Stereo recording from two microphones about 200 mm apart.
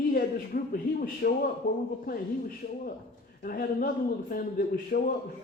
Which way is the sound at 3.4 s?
45° left (ahead or behind).